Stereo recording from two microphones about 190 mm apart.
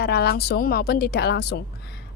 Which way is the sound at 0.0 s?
60° left (ahead or behind).